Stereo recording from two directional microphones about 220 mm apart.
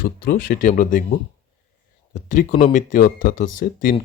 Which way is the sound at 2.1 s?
40° left (ahead or behind).